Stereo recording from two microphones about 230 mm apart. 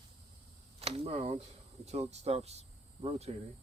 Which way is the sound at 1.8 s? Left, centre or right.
Right.